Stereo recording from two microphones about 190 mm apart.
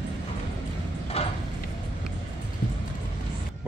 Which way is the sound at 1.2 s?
30° left (ahead or behind).